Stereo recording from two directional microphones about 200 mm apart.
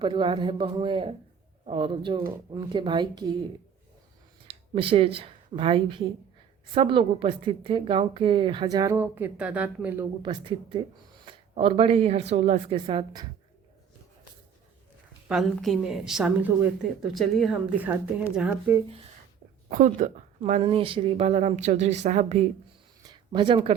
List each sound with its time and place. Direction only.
0.0 s a woman's voice: 25° right (ahead or behind)
4.4 s a woman's voice: 25° right (ahead or behind); by 10.1 s 10° right (ahead or behind)
10.2 s a woman's voice: 25° right (ahead or behind)
15.3 s a woman's voice: centre (ahead or behind)
19.7 s a woman's voice: 40° right (ahead or behind)
23.0 s a sound: 20° right (ahead or behind)